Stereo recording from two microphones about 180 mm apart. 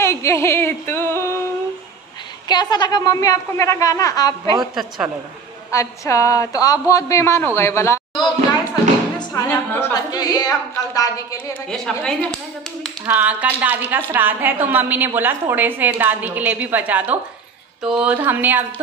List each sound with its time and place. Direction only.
0.0 s a sound: 15° left (ahead or behind)
2.4 s a woman's voice: 25° left (ahead or behind)
4.7 s a woman's voice: 5° right (ahead or behind)
5.7 s a woman's voice: 15° left (ahead or behind)
9.3 s a woman's voice: 10° left (ahead or behind)
10.1 s a woman's voice: 20° left (ahead or behind)
11.7 s a woman's voice: centre (ahead or behind)
13.0 s a woman's voice: 10° right (ahead or behind)